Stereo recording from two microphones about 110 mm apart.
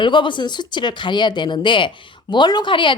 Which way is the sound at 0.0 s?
45° left (ahead or behind).